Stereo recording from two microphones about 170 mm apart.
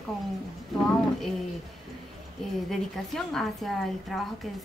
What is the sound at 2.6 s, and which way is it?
A woman's voice, centre (ahead or behind).